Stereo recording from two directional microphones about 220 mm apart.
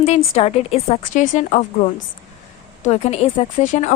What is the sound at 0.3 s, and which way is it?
A woman's voice, 30° left (ahead or behind).